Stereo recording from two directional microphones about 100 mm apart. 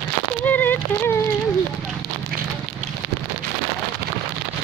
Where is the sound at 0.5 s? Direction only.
20° left (ahead or behind).